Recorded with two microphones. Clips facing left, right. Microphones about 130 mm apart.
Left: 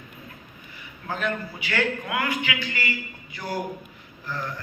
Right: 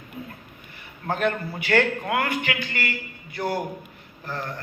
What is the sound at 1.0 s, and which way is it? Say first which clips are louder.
A man's voice: right 4 dB; 55° right (ahead or behind).